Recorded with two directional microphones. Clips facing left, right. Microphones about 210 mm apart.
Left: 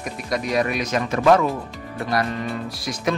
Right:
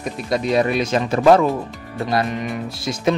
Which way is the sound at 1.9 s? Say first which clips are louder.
Right 3 dB; 20° right (ahead or behind).